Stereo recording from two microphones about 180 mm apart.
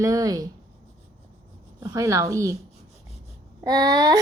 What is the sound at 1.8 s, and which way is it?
Speech, 15° right (ahead or behind).